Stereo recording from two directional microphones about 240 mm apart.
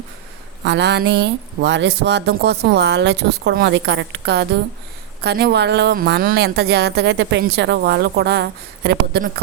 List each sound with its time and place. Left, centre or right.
0.6 s a woman's voice: right